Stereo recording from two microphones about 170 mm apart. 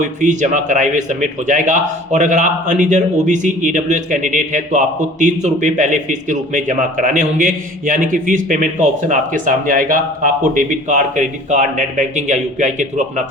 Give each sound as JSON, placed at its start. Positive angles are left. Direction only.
{"t": 0.0, "sound": "a man's voice", "side_deg": -45}